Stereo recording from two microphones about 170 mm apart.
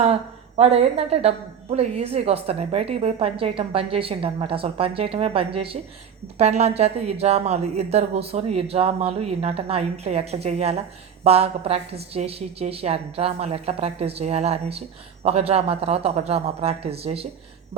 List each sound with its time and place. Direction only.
0.0 s a woman's voice: 40° right (ahead or behind)